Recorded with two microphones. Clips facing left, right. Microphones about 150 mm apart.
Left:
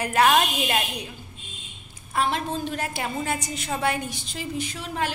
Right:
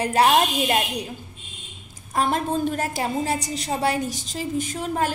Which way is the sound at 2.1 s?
45° right (ahead or behind).